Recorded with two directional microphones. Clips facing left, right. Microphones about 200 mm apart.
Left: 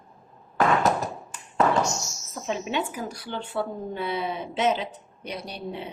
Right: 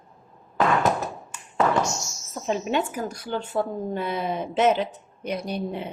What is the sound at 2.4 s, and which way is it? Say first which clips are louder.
Speech: right 3 dB; 45° right (ahead or behind).